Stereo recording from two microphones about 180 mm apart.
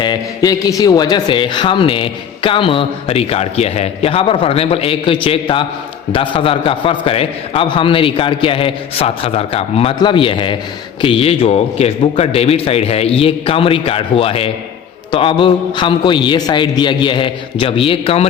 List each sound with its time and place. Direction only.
0.0 s a man's voice: 20° left (ahead or behind)